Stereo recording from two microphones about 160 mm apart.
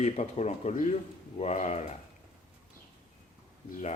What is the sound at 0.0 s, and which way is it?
Speech, 45° left (ahead or behind).